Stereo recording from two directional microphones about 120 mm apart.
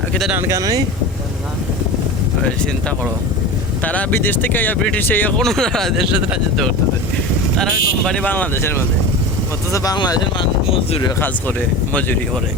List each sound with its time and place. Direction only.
0.4 s speech: 30° right (ahead or behind)
3.8 s speech: 15° left (ahead or behind)
5.4 s speech: 5° left (ahead or behind)
7.5 s speech: 5° left (ahead or behind)
9.7 s speech: 30° left (ahead or behind)